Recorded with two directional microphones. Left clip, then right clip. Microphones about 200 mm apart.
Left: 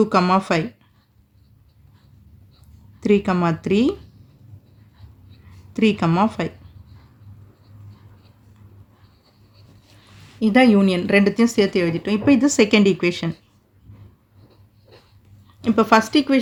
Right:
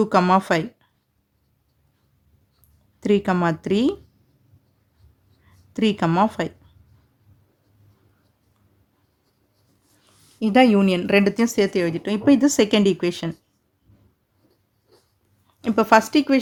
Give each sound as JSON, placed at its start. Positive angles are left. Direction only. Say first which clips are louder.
{"t": 0.0, "sound": "speech", "louder": "even", "side_deg": -25}
{"t": 3.0, "sound": "speech", "louder": "left 1 dB", "side_deg": -25}
{"t": 5.7, "sound": "speech", "louder": "left 1 dB", "side_deg": -25}
{"t": 10.4, "sound": "speech", "louder": "left 1 dB", "side_deg": -25}
{"t": 15.6, "sound": "speech", "louder": "even", "side_deg": -25}